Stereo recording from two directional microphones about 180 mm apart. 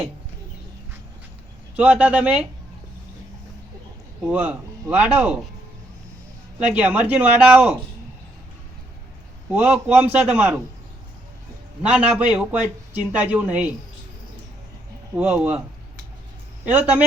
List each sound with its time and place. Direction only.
1.7 s a man's voice: 10° right (ahead or behind)
4.3 s a man's voice: 5° right (ahead or behind)
6.6 s a man's voice: 5° right (ahead or behind)
9.5 s a man's voice: 10° right (ahead or behind)
11.8 s a man's voice: 5° right (ahead or behind)
15.1 s a man's voice: 5° right (ahead or behind)
16.7 s a man's voice: 10° right (ahead or behind)